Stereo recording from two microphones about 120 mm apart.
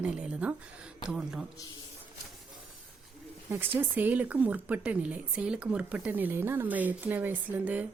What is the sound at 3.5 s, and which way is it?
Speech, 15° right (ahead or behind).